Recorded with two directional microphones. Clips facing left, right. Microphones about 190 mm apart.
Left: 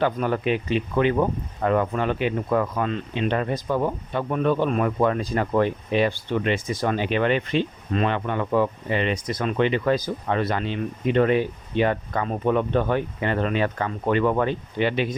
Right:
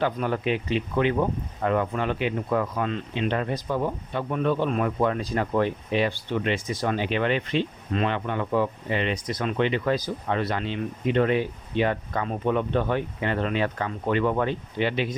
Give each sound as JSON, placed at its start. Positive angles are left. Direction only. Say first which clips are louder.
{"t": 0.0, "sound": "speech", "louder": "left 3 dB", "side_deg": 50}